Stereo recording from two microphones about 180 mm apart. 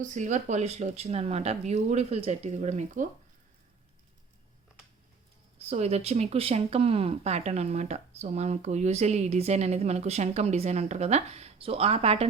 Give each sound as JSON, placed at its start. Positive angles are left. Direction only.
{"t": 0.0, "sound": "speech", "side_deg": -45}
{"t": 5.5, "sound": "speech", "side_deg": -35}